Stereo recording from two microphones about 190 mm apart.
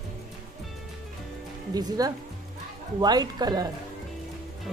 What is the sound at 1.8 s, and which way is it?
Speech, 20° right (ahead or behind).